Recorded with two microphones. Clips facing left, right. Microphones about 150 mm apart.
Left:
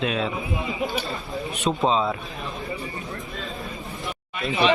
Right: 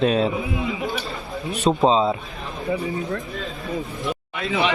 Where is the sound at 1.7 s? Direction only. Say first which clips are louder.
Right 5 dB; 30° right (ahead or behind).